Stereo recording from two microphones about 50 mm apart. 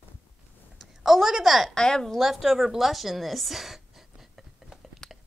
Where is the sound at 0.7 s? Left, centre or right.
Centre.